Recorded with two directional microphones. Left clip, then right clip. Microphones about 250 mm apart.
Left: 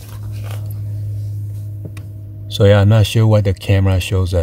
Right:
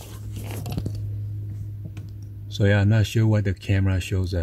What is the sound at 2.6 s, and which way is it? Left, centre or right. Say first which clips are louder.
Speech: left 11 dB; centre.